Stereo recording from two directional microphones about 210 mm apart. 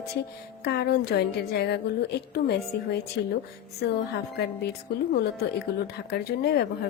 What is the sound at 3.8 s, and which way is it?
Speech, 50° left (ahead or behind).